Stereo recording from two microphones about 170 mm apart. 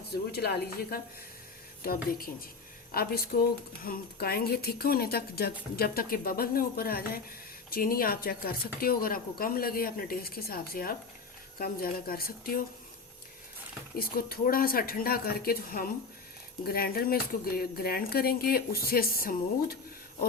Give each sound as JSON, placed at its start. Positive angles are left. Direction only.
{"t": 0.3, "sound": "a woman's voice", "side_deg": 65}
{"t": 13.9, "sound": "speech", "side_deg": 60}